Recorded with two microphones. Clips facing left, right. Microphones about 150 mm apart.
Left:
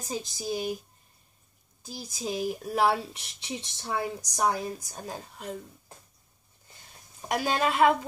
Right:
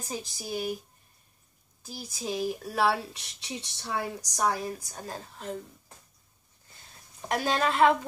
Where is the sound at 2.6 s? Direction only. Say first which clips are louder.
Left 3 dB; 20° left (ahead or behind).